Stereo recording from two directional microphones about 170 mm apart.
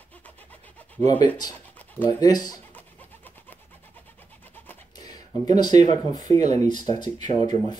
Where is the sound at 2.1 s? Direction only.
25° left (ahead or behind).